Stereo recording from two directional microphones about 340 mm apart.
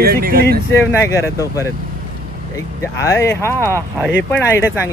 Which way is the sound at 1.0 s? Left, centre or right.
Centre.